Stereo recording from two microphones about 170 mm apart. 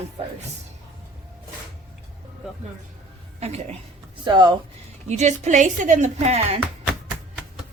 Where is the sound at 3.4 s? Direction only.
40° right (ahead or behind).